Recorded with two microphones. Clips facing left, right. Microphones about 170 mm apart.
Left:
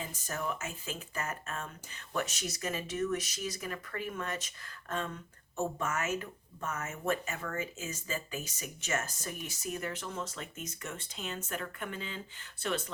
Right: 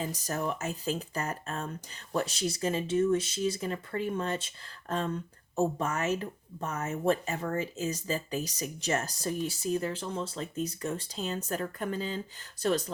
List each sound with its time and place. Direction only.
0.0 s speech: 40° right (ahead or behind)